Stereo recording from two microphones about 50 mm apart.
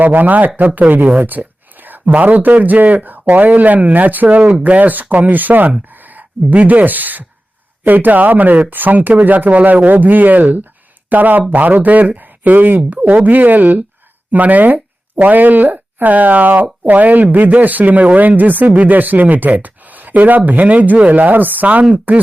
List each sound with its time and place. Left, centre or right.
0.0 s speech: right